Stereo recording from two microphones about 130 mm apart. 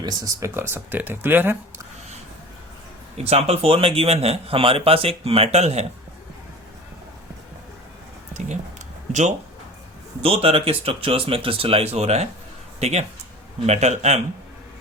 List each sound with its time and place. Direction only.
0.0 s speech: 30° right (ahead or behind)
3.2 s a man's voice: 55° right (ahead or behind)
10.2 s a man's voice: 45° right (ahead or behind)